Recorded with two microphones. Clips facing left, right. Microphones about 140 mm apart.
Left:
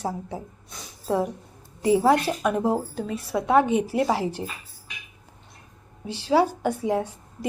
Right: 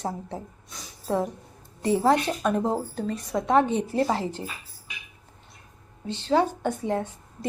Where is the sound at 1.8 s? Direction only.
10° left (ahead or behind).